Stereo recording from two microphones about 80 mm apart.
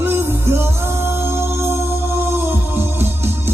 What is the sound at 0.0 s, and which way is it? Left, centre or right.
Music, right.